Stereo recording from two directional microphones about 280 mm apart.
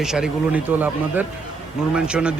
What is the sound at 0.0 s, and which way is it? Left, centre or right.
A man's voice, centre.